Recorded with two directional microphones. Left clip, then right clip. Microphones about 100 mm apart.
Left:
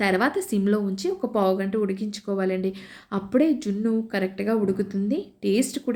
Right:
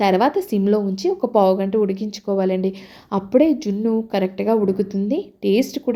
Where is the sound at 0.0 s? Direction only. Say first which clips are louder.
Right 6 dB; 25° right (ahead or behind).